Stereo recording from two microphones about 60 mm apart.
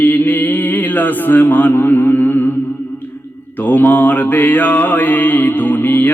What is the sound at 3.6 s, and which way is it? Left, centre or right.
Mantra, left.